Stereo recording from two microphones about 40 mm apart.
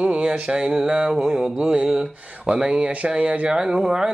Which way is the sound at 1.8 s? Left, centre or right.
Centre.